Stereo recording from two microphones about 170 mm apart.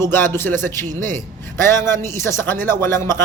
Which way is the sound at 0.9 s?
50° right (ahead or behind).